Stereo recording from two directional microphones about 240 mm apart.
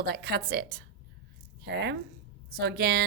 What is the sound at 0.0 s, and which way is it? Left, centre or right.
A woman's voice, right.